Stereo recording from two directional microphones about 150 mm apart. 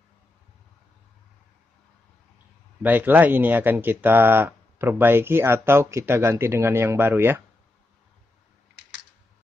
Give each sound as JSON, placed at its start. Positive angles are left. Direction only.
{"t": 2.8, "sound": "speech", "side_deg": -15}